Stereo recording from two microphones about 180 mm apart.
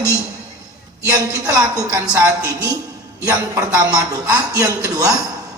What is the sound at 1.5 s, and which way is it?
A woman's voice, 20° right (ahead or behind).